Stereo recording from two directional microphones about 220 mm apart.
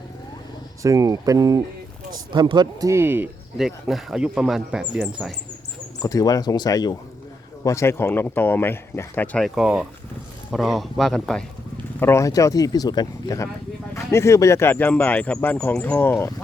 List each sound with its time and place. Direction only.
0.8 s speech: 15° right (ahead or behind)
6.0 s speech: 15° left (ahead or behind)